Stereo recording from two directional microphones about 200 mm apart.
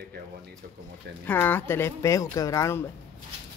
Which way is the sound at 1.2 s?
10° left (ahead or behind).